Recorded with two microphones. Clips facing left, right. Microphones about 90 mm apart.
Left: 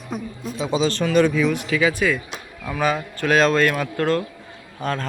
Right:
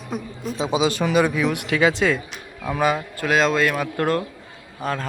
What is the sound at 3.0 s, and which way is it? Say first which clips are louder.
Speech: left 2 dB; 5° right (ahead or behind).